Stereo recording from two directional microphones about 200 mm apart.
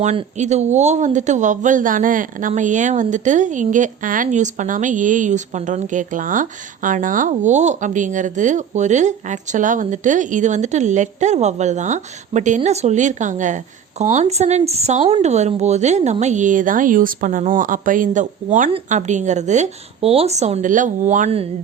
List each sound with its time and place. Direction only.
0.0 s speech: 35° right (ahead or behind)